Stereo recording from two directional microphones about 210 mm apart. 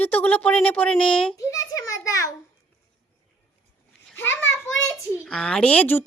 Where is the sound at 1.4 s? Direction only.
15° left (ahead or behind).